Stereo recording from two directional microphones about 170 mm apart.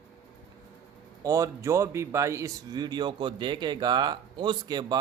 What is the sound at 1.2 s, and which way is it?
A man's voice, 20° right (ahead or behind).